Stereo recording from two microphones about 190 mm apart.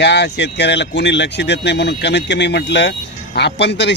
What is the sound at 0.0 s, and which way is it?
Speech, 65° left (ahead or behind).